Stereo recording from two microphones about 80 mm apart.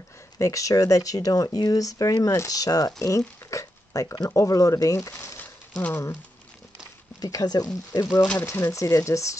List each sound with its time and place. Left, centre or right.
0.4 s speech: left
5.8 s speech: left
7.2 s speech: left
8.5 s speech: left
8.7 s speech: left